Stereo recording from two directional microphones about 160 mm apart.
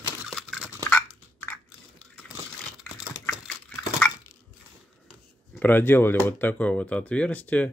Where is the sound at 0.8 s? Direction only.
10° left (ahead or behind).